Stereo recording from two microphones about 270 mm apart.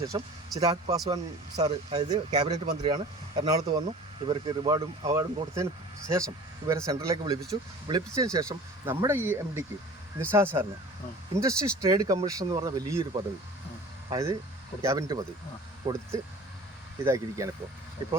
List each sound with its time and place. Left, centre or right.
0.0 s speech: centre